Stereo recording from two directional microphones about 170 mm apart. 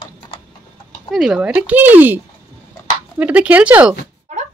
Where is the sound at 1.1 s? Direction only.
Centre (ahead or behind).